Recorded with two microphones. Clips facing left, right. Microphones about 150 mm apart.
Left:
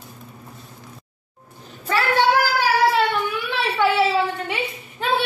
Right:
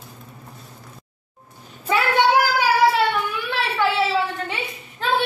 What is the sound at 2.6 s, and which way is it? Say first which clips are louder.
Singing: left 1 dB; 10° right (ahead or behind).